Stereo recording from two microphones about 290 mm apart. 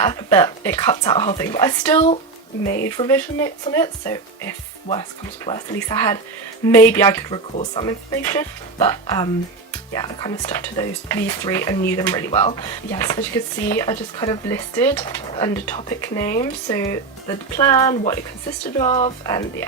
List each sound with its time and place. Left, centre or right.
0.0 s speech: centre
7.5 s speech: left
7.9 s speech: centre